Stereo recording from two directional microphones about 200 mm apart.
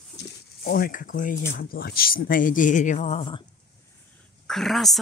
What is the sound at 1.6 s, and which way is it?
Speech, 50° left (ahead or behind).